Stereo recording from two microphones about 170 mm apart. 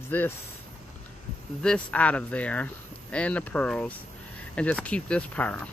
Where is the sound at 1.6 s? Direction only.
5° left (ahead or behind).